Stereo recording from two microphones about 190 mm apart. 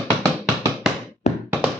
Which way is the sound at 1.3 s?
35° left (ahead or behind).